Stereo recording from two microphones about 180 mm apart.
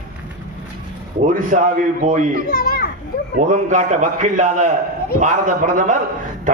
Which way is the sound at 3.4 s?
40° right (ahead or behind).